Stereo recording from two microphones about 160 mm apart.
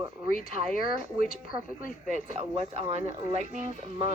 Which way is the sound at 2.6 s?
40° right (ahead or behind).